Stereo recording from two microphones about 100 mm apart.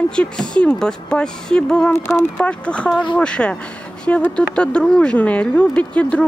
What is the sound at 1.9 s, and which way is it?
Speech, 25° left (ahead or behind).